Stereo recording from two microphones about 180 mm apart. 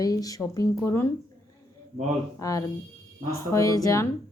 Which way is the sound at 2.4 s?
20° left (ahead or behind).